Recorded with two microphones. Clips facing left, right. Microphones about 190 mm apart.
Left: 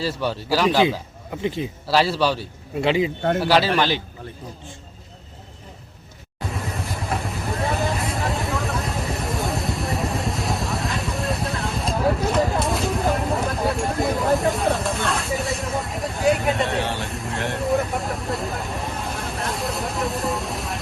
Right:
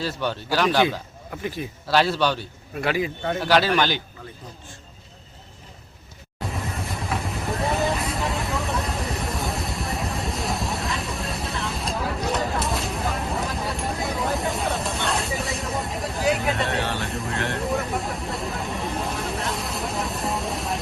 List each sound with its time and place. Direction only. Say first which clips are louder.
0.0 s speech: left 2 dB; 5° left (ahead or behind); by 1.6 s 20° left (ahead or behind)
1.9 s a man's voice: left 1 dB; 5° left (ahead or behind)
2.7 s a man's voice: left 4 dB; 20° left (ahead or behind)
3.3 s a man's voice: even; 5° left (ahead or behind)
6.4 s vehicle: left 1 dB; centre (ahead or behind)
16.6 s vehicle: left 1 dB; 15° left (ahead or behind)
17.1 s a sound: right 1 dB; centre (ahead or behind)
17.3 s vehicle: left 2 dB; 15° left (ahead or behind)
17.6 s vehicle: left 3 dB; centre (ahead or behind)